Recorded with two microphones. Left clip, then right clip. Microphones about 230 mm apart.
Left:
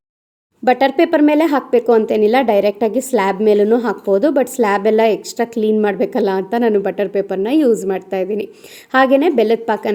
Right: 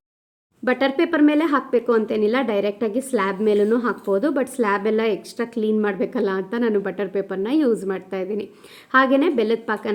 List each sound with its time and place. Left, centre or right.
0.6 s speech: centre